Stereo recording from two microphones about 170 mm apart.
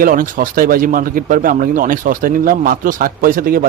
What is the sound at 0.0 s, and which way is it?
Speech, 55° right (ahead or behind).